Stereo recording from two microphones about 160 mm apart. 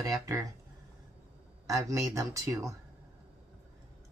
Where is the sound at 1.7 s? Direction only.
20° right (ahead or behind).